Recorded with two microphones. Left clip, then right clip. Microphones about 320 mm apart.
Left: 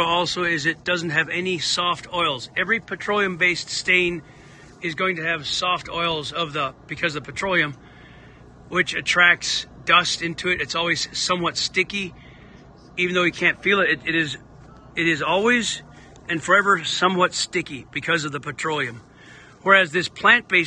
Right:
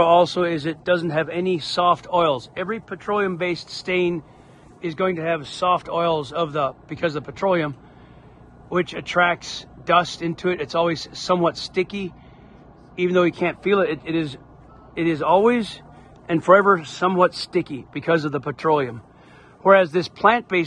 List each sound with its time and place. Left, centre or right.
0.1 s speech: centre
8.7 s speech: centre